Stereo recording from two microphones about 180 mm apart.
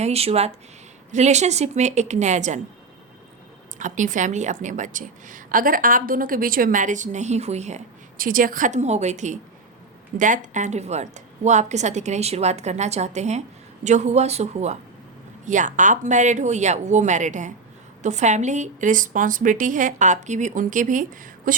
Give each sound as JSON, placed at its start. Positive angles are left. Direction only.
{"t": 0.0, "sound": "a woman's voice", "side_deg": -35}
{"t": 3.8, "sound": "a woman's voice", "side_deg": -45}
{"t": 8.2, "sound": "a woman's voice", "side_deg": -50}